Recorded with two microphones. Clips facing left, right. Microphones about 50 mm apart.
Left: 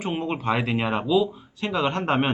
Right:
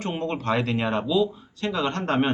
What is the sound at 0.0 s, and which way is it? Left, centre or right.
Speech, centre.